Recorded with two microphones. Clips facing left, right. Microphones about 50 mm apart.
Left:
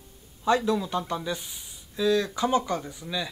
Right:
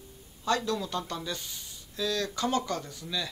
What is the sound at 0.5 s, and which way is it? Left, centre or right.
Speech, centre.